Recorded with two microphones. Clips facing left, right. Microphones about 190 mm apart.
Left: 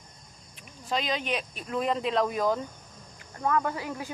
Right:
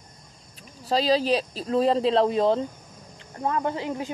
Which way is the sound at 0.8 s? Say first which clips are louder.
Right 8 dB; 35° right (ahead or behind).